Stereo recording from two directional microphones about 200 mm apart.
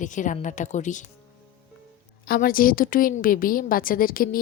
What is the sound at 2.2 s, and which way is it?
Speech, 45° left (ahead or behind).